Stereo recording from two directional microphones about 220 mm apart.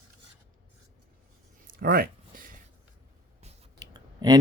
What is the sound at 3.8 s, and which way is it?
Clicking, 20° right (ahead or behind).